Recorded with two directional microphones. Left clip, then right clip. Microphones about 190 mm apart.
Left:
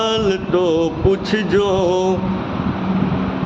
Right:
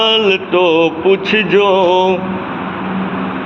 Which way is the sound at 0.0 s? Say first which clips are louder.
Right 6 dB; 15° left (ahead or behind).